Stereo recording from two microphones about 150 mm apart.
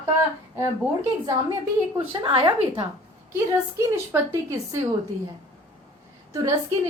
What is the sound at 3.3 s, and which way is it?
A woman's voice, 15° right (ahead or behind).